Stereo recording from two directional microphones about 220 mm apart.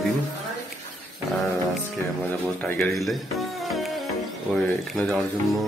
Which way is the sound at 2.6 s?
5° left (ahead or behind).